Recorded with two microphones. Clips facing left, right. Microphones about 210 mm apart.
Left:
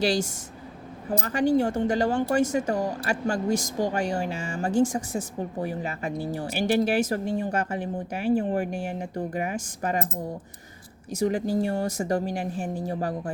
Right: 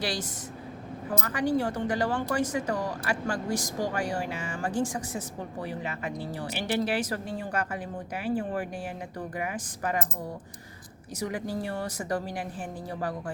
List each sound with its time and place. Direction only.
0.0 s speech: 25° left (ahead or behind)
11.1 s speech: 30° left (ahead or behind)